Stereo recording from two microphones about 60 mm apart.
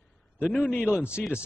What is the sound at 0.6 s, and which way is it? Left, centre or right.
Speech, left.